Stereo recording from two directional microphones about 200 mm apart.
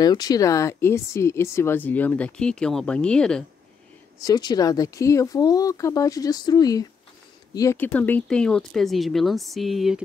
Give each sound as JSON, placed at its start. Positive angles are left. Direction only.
{"t": 0.0, "sound": "speech", "side_deg": 20}
{"t": 4.2, "sound": "speech", "side_deg": 20}